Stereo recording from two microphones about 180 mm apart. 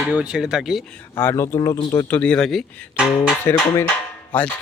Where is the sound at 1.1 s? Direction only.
15° left (ahead or behind); by 3.3 s 5° right (ahead or behind).